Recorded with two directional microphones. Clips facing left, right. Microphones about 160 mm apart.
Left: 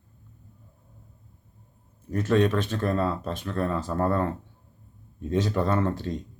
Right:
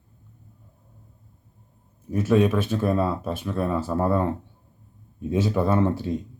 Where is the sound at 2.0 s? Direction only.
10° right (ahead or behind).